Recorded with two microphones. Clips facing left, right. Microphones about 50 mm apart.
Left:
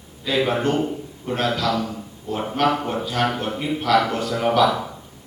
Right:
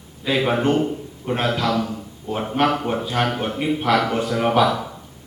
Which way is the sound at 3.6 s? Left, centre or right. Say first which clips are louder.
Even; centre.